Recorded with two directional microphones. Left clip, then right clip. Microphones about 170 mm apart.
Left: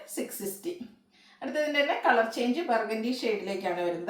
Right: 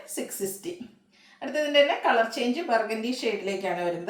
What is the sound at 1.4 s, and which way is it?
A woman's voice, 15° right (ahead or behind).